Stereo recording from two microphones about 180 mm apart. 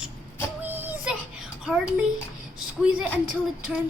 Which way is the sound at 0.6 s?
10° right (ahead or behind).